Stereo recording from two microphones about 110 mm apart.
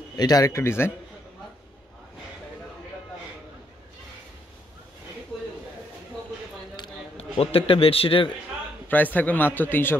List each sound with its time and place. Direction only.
0.1 s a man's voice: 35° left (ahead or behind)
6.8 s a sound: 45° left (ahead or behind)
7.2 s a man's voice: 60° left (ahead or behind)
8.8 s a man's voice: 15° left (ahead or behind)